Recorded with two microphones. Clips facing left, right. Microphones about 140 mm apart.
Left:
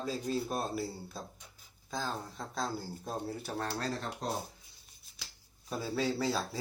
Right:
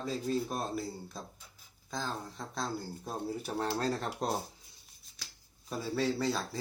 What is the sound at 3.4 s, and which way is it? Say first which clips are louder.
Speech: right 3 dB; 20° right (ahead or behind).